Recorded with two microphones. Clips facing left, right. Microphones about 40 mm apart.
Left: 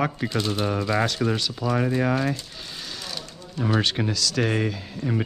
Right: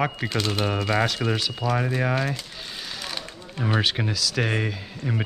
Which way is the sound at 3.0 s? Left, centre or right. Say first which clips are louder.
Right 2 dB; right.